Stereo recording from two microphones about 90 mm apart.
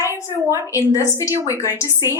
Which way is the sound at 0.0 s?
35° left (ahead or behind).